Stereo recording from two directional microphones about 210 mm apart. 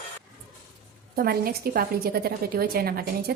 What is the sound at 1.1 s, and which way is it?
Speech, 45° right (ahead or behind).